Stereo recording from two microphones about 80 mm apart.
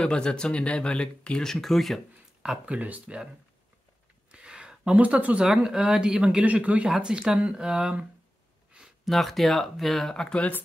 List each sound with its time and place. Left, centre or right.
0.0 s speech: centre
2.4 s speech: centre
4.3 s a sound: centre
5.4 s speech: centre
6.4 s speech: centre
8.7 s a sound: centre
9.1 s speech: centre